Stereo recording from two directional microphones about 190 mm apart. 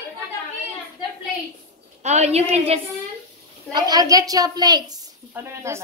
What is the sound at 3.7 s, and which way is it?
A woman's voice, 20° right (ahead or behind).